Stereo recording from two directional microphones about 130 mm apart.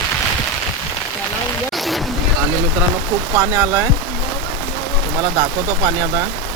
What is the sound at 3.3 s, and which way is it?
Speech, 20° right (ahead or behind).